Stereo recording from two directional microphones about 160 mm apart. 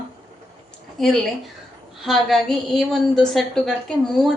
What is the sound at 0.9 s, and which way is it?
Speech, centre (ahead or behind).